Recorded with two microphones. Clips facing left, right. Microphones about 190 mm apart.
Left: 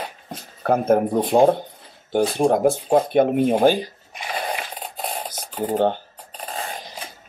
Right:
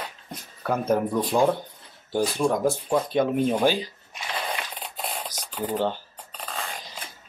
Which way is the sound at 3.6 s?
50° left (ahead or behind).